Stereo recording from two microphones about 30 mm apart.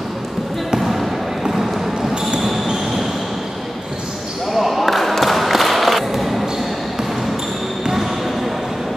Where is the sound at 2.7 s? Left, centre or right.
Centre.